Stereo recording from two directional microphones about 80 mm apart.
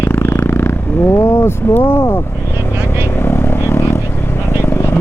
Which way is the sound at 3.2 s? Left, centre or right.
Left.